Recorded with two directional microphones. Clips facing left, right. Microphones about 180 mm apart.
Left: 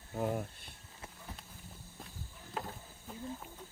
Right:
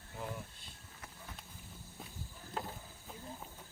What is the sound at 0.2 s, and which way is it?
Speech, 50° left (ahead or behind).